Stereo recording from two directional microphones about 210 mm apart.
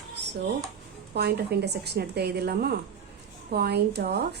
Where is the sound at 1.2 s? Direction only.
50° right (ahead or behind).